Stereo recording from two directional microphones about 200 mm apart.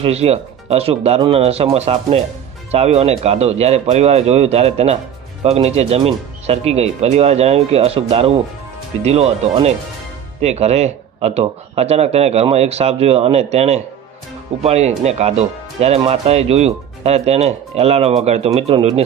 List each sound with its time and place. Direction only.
0.0 s speech: 30° right (ahead or behind)